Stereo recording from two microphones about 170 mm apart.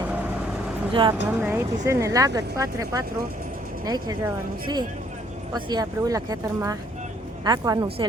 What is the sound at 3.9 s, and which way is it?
Speech, 25° right (ahead or behind).